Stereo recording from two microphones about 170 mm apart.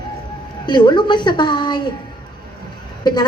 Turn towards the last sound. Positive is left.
turn(degrees=25)  # may be behind; listen again after turning